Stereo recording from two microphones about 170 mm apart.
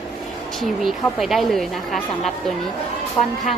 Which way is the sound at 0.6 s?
Centre (ahead or behind).